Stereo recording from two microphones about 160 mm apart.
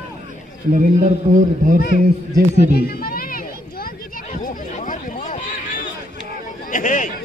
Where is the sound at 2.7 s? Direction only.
70° left (ahead or behind).